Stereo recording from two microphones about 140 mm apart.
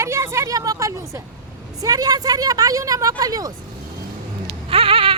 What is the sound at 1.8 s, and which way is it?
A woman's voice, 25° right (ahead or behind).